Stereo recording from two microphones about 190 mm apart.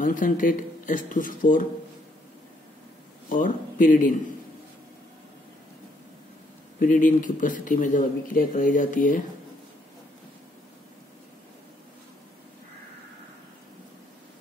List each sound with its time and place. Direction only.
0.0 s speech: 45° left (ahead or behind)
3.3 s speech: 45° left (ahead or behind)
6.8 s speech: 45° left (ahead or behind)